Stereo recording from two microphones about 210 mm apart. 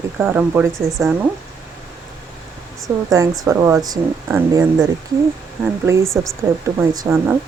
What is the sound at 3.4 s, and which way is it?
Speech, 15° right (ahead or behind).